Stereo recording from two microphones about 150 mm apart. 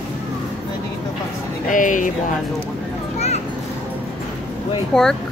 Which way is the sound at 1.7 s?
60° left (ahead or behind).